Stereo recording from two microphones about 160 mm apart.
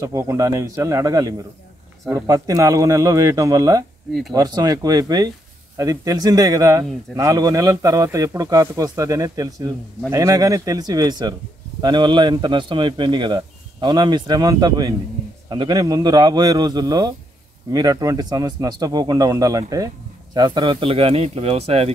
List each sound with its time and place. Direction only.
0.0 s a man's voice: 20° right (ahead or behind); by 21.9 s 40° right (ahead or behind)